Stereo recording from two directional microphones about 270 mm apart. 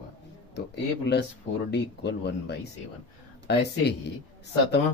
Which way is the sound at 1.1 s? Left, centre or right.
Left.